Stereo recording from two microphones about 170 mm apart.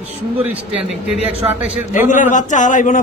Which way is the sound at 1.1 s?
35° left (ahead or behind).